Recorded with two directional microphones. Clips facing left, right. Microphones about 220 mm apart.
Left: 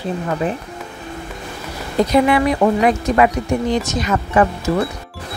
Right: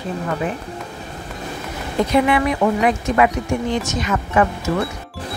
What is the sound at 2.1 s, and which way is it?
Speech, 40° left (ahead or behind).